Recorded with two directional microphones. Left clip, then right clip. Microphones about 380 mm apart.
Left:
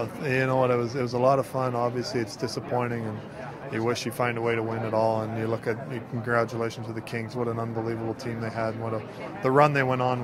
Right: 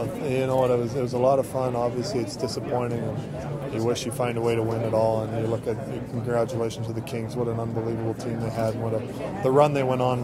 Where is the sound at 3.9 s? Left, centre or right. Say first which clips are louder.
Even; left.